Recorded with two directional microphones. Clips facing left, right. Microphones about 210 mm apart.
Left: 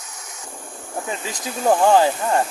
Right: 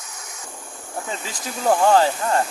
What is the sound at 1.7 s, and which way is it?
Speech, 15° left (ahead or behind).